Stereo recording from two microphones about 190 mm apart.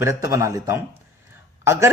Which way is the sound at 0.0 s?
15° right (ahead or behind).